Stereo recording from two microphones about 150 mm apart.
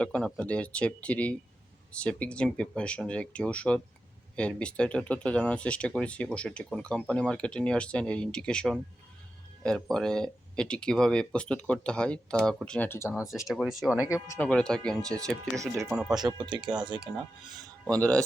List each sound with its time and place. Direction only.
0.0 s speech: 5° left (ahead or behind); by 13.5 s 20° left (ahead or behind)
13.5 s speech: centre (ahead or behind)
14.1 s speech: 20° left (ahead or behind)
14.4 s speech: 5° left (ahead or behind)
15.5 s speech: 20° right (ahead or behind)
15.9 s speech: 5° right (ahead or behind)
16.1 s speech: 30° right (ahead or behind)
17.9 s speech: 5° left (ahead or behind)